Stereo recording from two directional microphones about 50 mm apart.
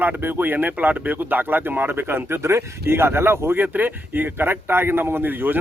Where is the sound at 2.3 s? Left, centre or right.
Right.